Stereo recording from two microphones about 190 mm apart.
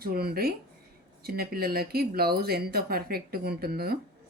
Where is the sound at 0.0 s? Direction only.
55° right (ahead or behind).